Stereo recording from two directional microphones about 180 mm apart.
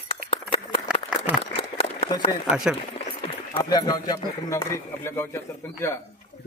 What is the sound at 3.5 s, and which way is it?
A man's voice, 25° left (ahead or behind).